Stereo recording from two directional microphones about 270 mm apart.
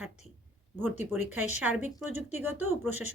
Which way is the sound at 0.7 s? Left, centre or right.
Centre.